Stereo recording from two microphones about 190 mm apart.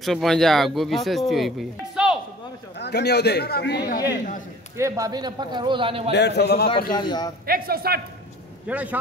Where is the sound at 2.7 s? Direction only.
60° left (ahead or behind).